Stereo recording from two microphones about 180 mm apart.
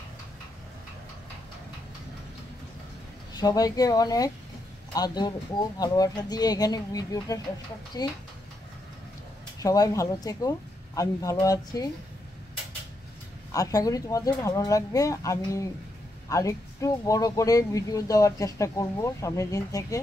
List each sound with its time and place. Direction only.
3.3 s speech: 20° left (ahead or behind)
9.6 s speech: 20° left (ahead or behind)
13.5 s speech: 20° left (ahead or behind)